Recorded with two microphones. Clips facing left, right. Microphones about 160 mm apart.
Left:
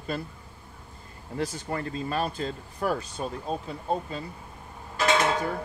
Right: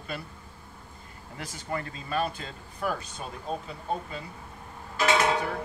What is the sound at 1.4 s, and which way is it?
Speech, 35° left (ahead or behind).